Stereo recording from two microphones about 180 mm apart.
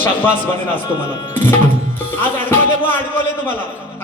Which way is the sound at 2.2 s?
10° left (ahead or behind).